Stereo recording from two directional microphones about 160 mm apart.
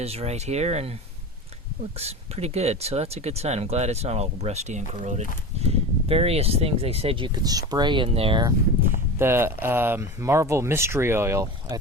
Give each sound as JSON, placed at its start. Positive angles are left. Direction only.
{"t": 0.0, "sound": "speech", "side_deg": -40}
{"t": 2.0, "sound": "speech", "side_deg": -40}
{"t": 7.7, "sound": "speech", "side_deg": -30}
{"t": 9.1, "sound": "speech", "side_deg": -15}